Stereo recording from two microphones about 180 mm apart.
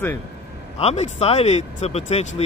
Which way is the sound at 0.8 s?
35° left (ahead or behind).